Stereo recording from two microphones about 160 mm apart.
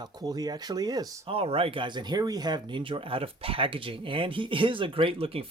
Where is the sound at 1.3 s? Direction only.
35° right (ahead or behind).